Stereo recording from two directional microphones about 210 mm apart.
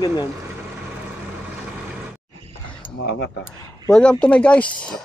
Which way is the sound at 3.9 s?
5° left (ahead or behind).